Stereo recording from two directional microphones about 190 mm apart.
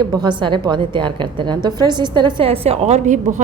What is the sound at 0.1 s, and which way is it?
A woman's voice, 20° right (ahead or behind).